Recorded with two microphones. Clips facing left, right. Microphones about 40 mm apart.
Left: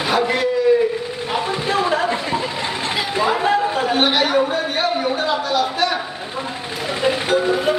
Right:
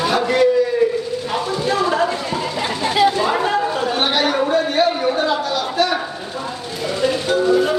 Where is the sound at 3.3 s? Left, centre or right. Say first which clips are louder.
Left 1 dB; centre.